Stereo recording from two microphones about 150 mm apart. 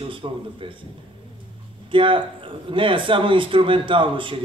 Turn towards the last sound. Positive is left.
turn(degrees=-35)  # may be behind; listen again after turning